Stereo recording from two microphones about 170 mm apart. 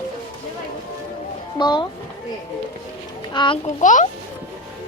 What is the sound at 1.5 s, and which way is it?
Speech, 25° left (ahead or behind).